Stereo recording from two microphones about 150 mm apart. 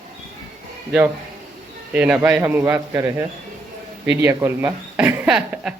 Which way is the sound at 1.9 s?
10° right (ahead or behind).